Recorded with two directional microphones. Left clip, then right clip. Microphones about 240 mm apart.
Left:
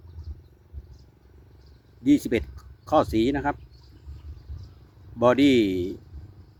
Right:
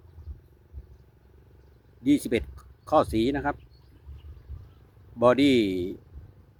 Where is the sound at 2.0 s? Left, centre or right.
Centre.